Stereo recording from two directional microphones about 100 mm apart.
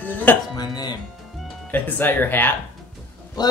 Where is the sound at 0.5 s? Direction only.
45° left (ahead or behind).